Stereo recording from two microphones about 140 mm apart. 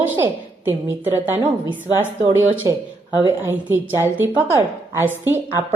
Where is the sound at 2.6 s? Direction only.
25° right (ahead or behind).